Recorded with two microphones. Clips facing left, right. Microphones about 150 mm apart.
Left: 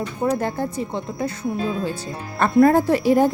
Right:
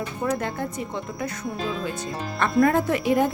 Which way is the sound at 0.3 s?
30° left (ahead or behind).